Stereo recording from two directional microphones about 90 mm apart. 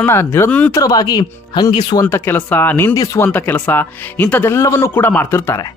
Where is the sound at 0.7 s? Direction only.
45° left (ahead or behind).